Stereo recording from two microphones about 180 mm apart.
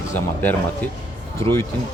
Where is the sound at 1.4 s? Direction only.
35° right (ahead or behind).